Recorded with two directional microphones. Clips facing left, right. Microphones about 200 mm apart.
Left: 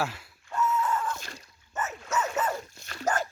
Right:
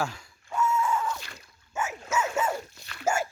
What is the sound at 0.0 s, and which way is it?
Chicken, 5° left (ahead or behind).